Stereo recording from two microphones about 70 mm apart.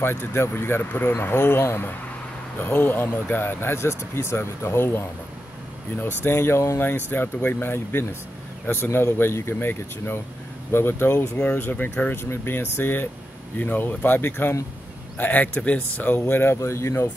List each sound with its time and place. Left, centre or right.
0.0 s speech: left
6.2 s speech: left
7.1 s speech: left
16.5 s speech: left